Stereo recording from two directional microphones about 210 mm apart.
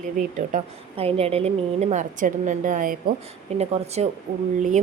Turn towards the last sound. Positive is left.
turn(degrees=-35)  # may be behind; listen again after turning